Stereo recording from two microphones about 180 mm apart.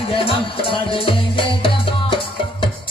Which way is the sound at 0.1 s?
30° left (ahead or behind).